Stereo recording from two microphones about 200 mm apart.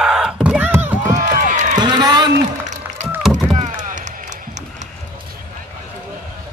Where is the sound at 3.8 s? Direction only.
40° right (ahead or behind).